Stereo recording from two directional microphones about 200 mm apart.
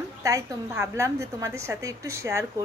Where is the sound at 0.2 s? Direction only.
15° right (ahead or behind).